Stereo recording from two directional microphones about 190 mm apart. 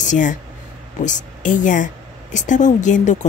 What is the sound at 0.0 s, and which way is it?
Speech, 40° left (ahead or behind).